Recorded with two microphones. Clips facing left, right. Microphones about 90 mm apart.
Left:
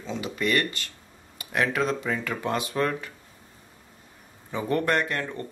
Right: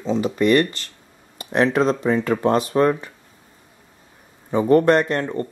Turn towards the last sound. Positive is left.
turn(degrees=-30)  # may be behind; listen again after turning